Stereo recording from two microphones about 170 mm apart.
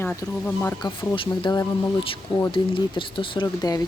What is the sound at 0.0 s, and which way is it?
Speech, 10° left (ahead or behind).